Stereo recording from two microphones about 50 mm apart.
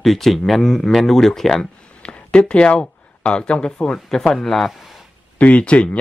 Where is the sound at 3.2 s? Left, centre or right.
Centre.